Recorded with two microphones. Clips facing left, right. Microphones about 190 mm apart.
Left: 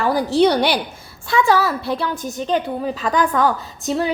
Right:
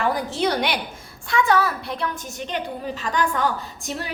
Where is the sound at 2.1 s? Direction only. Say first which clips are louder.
Left 7 dB; 35° left (ahead or behind).